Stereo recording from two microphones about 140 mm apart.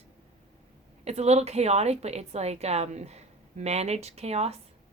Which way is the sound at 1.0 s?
50° right (ahead or behind).